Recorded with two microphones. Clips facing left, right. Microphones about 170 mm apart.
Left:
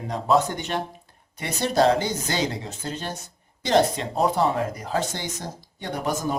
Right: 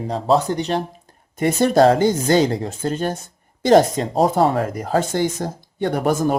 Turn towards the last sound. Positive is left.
turn(degrees=-55)  # may be behind; listen again after turning